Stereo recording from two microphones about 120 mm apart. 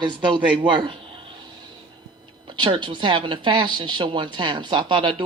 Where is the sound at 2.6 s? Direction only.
40° right (ahead or behind).